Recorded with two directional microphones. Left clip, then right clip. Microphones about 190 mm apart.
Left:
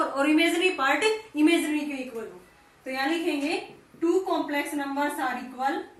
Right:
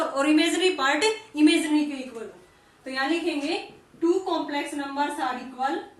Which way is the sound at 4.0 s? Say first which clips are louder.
Right 1 dB; centre (ahead or behind).